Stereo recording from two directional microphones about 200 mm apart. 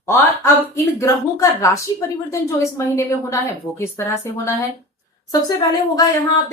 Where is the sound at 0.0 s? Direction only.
15° left (ahead or behind).